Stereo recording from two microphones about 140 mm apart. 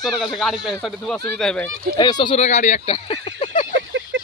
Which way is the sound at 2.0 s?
30° left (ahead or behind).